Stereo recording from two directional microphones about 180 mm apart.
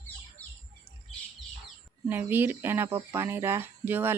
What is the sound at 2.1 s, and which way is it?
Speech, 10° right (ahead or behind).